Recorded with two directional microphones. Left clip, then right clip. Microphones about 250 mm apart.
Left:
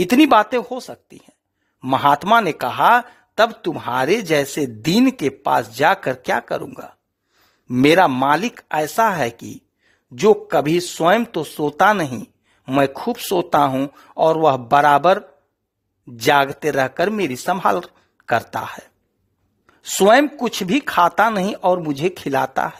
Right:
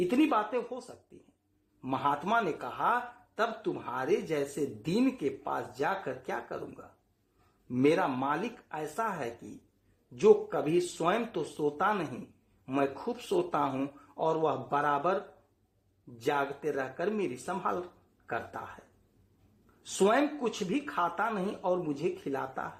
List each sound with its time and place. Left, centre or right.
0.1 s speech: left
16.2 s speech: left
19.8 s a woman's voice: left